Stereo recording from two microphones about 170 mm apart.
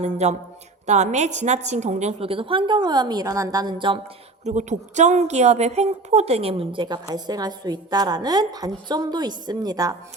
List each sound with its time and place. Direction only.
0.0 s a woman's voice: 40° right (ahead or behind)
4.4 s a woman's voice: 45° right (ahead or behind); by 9.9 s 20° right (ahead or behind)